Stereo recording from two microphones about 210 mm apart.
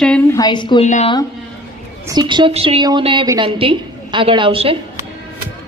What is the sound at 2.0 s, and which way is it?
A woman's voice, 20° right (ahead or behind).